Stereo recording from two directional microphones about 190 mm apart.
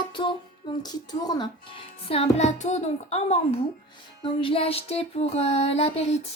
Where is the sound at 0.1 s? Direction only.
25° left (ahead or behind).